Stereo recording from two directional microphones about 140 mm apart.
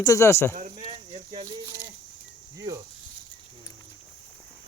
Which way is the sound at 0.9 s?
45° right (ahead or behind).